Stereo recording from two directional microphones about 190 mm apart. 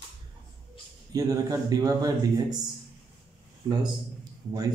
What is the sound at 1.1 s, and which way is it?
A man's voice, 20° right (ahead or behind).